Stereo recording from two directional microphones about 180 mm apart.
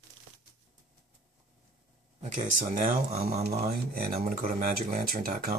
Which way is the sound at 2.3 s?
40° right (ahead or behind).